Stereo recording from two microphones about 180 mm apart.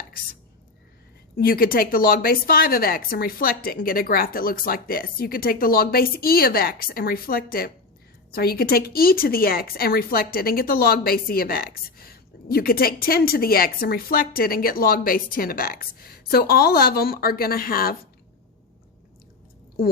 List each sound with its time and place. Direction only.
1.4 s speech: 55° left (ahead or behind)